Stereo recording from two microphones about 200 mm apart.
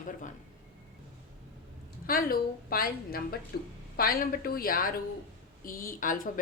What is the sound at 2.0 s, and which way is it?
A woman's voice, 45° left (ahead or behind).